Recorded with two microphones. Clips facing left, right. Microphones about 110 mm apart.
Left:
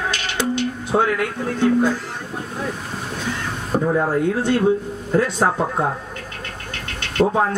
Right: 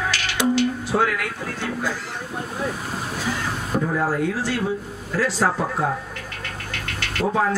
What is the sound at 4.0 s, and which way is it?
Speech, 25° left (ahead or behind).